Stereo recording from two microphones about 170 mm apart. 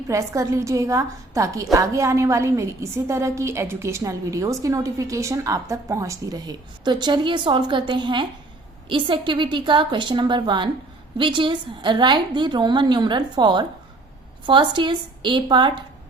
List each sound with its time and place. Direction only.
0.1 s a woman's voice: 20° right (ahead or behind)